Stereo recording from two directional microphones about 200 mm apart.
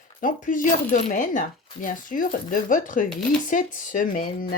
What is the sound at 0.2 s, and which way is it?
Speech, 45° left (ahead or behind).